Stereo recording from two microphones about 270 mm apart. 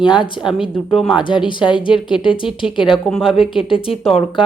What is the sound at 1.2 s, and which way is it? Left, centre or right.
Speech, centre.